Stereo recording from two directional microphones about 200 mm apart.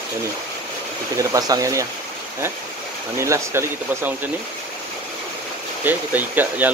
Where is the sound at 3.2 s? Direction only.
15° right (ahead or behind).